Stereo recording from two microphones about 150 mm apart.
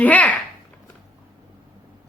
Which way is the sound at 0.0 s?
10° left (ahead or behind).